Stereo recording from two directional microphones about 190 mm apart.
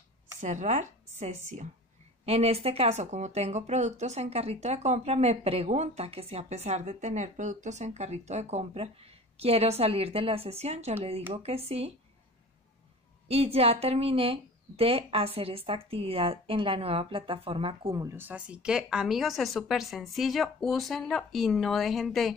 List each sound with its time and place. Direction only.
0.4 s speech: 40° right (ahead or behind)
13.3 s speech: 30° right (ahead or behind)
18.0 s a woman's voice: 10° right (ahead or behind)